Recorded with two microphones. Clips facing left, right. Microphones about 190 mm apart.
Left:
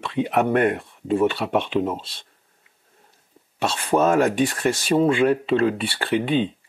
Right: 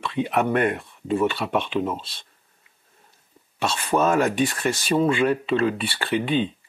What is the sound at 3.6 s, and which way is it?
Speech, 40° left (ahead or behind).